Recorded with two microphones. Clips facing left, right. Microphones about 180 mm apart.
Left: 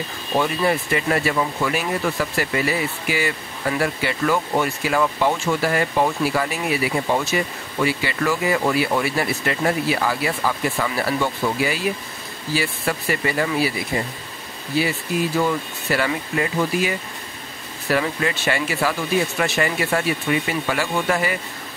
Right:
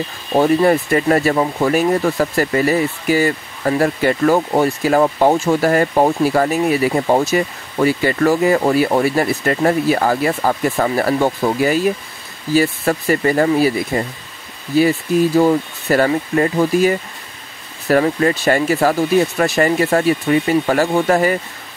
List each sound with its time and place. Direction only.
0.4 s speech: 40° right (ahead or behind)